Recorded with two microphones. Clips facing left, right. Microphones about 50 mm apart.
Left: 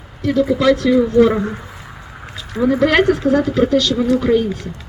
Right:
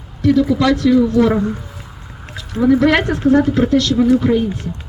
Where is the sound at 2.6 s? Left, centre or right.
Centre.